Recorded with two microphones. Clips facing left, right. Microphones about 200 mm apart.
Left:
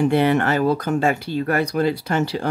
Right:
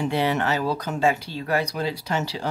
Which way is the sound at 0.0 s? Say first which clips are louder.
Left 6 dB; 55° left (ahead or behind).